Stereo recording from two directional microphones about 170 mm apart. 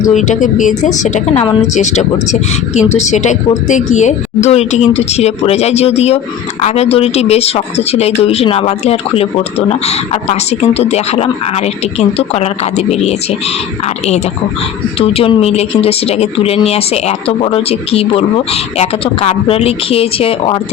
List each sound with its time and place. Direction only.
0.0 s a woman's voice: 45° left (ahead or behind)
14.9 s speech: 35° left (ahead or behind)